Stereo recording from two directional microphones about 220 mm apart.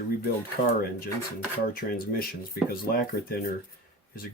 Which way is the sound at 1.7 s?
40° left (ahead or behind).